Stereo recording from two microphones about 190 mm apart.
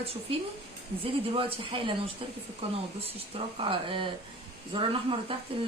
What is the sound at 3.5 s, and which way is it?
A woman's voice, 25° right (ahead or behind).